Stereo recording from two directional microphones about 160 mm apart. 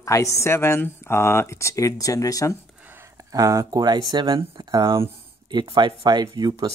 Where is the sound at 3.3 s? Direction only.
20° right (ahead or behind).